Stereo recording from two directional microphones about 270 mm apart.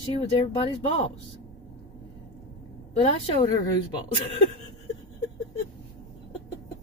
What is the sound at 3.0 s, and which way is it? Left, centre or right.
Speech, left.